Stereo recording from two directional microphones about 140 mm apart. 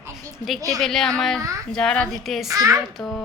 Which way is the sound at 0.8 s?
Centre (ahead or behind).